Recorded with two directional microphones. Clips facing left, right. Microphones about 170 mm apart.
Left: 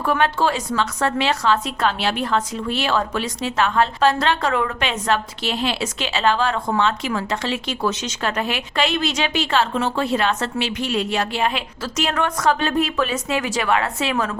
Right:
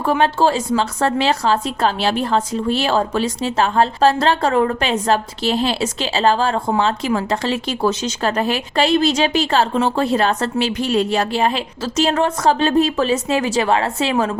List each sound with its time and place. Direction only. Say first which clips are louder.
0.0 s a woman's voice: right 4 dB; 30° right (ahead or behind)